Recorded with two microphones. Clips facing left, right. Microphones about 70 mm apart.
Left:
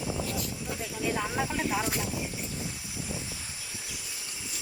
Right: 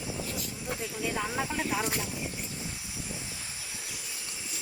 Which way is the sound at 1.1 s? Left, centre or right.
Centre.